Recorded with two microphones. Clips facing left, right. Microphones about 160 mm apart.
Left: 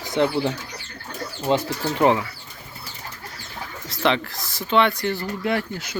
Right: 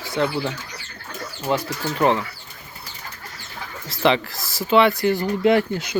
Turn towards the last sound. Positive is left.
turn(degrees=-20)  # may be behind; listen again after turning